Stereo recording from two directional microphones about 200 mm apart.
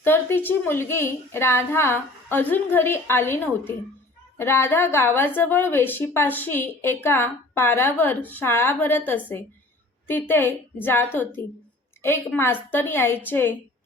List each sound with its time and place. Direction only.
0.0 s a woman's voice: 10° left (ahead or behind)